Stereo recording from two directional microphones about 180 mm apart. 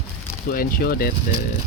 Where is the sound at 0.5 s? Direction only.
55° left (ahead or behind).